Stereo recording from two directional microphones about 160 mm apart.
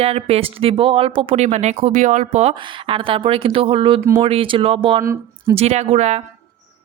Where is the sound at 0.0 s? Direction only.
40° right (ahead or behind).